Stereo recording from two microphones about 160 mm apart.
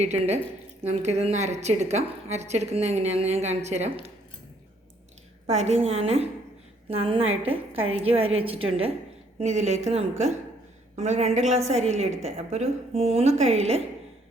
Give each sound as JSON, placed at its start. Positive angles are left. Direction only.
{"t": 0.0, "sound": "a woman's voice", "side_deg": -45}
{"t": 5.5, "sound": "a woman's voice", "side_deg": -45}